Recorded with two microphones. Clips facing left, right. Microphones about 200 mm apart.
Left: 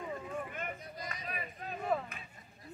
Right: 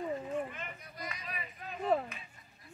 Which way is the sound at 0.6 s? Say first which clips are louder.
Left 3 dB; 45° left (ahead or behind).